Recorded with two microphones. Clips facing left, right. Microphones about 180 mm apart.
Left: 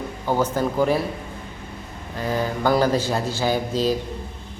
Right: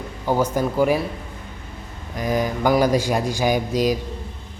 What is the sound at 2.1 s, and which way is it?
Speech, 15° right (ahead or behind).